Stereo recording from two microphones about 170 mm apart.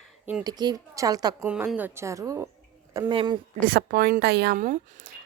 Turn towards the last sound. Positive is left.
turn(degrees=-75)  # may be behind; listen again after turning